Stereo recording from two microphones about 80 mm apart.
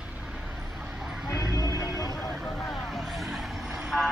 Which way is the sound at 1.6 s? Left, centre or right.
Left.